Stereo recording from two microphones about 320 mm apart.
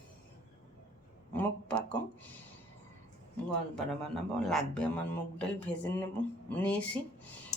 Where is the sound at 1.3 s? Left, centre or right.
Centre.